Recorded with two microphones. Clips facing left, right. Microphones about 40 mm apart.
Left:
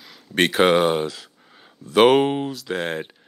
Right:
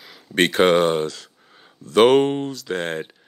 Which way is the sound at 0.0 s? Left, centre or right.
Centre.